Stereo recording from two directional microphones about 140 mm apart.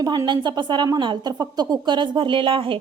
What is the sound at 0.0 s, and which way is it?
A woman's voice, 30° right (ahead or behind).